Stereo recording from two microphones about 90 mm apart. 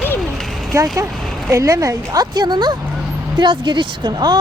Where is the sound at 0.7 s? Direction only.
35° right (ahead or behind).